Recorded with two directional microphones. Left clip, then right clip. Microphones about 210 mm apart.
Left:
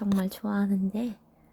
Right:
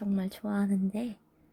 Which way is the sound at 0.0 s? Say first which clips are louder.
Left 4 dB; 10° left (ahead or behind).